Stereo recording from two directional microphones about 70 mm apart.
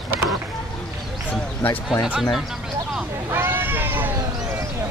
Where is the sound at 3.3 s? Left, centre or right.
Right.